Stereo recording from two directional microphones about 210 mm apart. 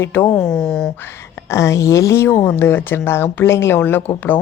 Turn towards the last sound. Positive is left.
turn(degrees=10)  # may be behind; listen again after turning